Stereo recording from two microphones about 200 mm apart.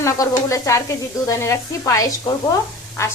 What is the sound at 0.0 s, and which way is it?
Speech, 15° left (ahead or behind).